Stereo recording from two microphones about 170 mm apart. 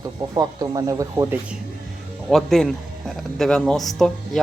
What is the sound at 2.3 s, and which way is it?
Speech, centre (ahead or behind).